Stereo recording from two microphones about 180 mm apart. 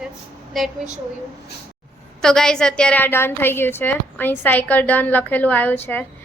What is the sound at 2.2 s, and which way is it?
A woman's voice, 5° left (ahead or behind).